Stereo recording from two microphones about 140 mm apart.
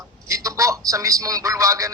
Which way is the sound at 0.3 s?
20° right (ahead or behind).